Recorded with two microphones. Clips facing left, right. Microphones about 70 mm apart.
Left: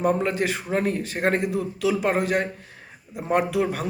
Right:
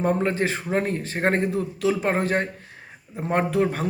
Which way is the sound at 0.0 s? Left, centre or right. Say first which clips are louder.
Even; right.